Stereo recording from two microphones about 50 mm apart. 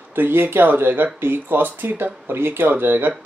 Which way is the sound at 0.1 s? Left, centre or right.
Right.